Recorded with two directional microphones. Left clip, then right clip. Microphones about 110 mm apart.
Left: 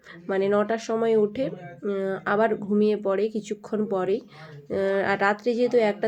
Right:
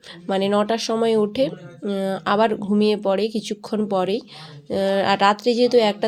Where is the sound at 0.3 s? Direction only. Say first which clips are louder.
Right 3 dB; 45° right (ahead or behind).